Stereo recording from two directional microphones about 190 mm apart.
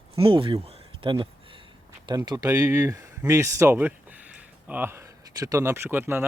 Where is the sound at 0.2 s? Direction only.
30° right (ahead or behind).